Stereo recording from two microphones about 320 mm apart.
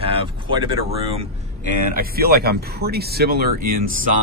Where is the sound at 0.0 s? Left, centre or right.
Centre.